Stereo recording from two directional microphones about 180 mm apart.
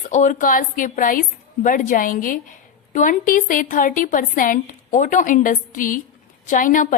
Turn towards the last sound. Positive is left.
turn(degrees=50)  # may be behind; listen again after turning